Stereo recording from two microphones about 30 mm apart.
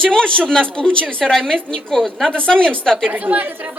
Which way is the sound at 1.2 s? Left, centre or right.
Centre.